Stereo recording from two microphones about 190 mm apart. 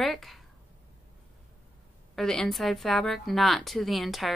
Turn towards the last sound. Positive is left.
turn(degrees=0)  # may be behind; listen again after turning